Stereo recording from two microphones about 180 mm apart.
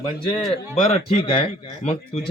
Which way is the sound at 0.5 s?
30° left (ahead or behind).